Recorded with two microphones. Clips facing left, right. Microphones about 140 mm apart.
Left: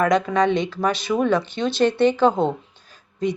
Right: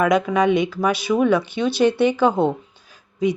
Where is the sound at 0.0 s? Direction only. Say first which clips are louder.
Right 1 dB; 10° right (ahead or behind).